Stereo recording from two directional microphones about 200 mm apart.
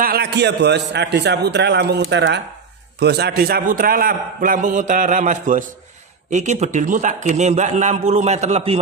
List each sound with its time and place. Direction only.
0.0 s a man's voice: 50° right (ahead or behind); by 8.7 s 35° right (ahead or behind)